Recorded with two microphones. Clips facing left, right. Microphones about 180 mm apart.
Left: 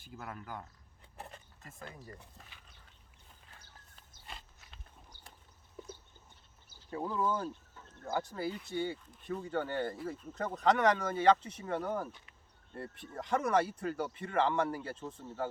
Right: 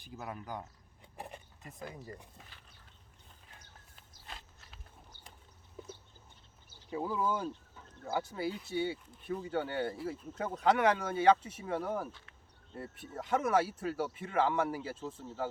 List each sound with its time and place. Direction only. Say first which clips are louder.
0.0 s speech: right 2 dB; 20° right (ahead or behind)
4.3 s a sound: even; centre (ahead or behind)
6.9 s speech: even; 5° right (ahead or behind)